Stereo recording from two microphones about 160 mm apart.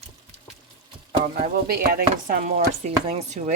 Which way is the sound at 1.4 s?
70° right (ahead or behind).